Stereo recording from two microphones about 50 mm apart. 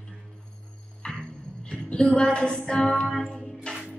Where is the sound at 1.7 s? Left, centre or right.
Centre.